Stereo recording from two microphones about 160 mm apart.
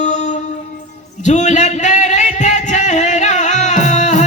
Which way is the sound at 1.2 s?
45° left (ahead or behind).